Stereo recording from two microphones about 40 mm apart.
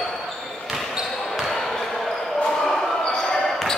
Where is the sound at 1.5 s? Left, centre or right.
Centre.